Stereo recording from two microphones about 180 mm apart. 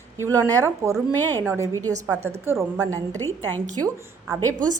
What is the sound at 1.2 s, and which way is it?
Speech, 10° left (ahead or behind).